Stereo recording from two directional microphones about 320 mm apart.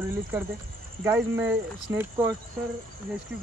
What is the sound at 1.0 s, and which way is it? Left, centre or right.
Speech, centre.